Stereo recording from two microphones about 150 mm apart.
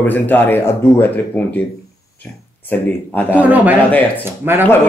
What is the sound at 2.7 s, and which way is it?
Speech, 10° left (ahead or behind).